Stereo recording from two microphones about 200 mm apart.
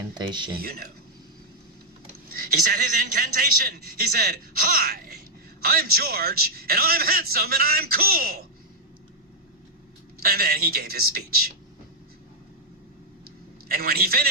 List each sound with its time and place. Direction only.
0.1 s speech: 20° right (ahead or behind)
0.5 s a man's voice: 50° right (ahead or behind)
2.3 s a man's voice: 45° right (ahead or behind)
10.2 s a man's voice: 50° right (ahead or behind)
13.7 s a man's voice: 50° right (ahead or behind)